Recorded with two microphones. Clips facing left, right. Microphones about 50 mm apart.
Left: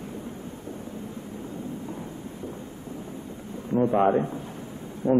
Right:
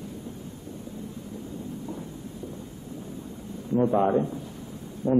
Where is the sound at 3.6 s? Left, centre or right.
Left.